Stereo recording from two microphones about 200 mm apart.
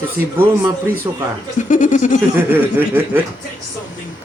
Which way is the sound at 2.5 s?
10° right (ahead or behind).